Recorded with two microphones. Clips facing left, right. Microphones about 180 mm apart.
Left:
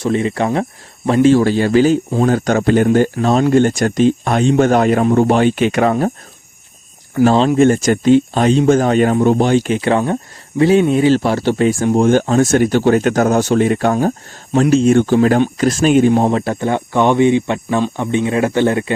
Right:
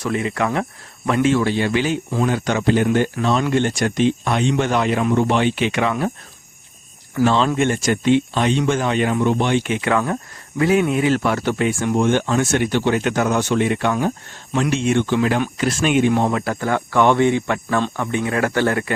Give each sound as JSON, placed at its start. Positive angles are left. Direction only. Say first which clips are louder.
{"t": 0.0, "sound": "speech", "louder": "left 5 dB", "side_deg": 30}
{"t": 7.3, "sound": "speech", "louder": "left 7 dB", "side_deg": 35}